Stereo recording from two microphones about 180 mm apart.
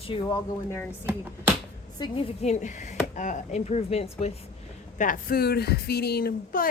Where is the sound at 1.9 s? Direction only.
25° left (ahead or behind).